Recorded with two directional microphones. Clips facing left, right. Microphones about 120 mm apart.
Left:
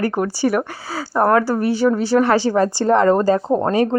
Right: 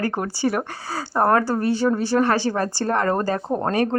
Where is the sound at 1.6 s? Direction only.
10° left (ahead or behind).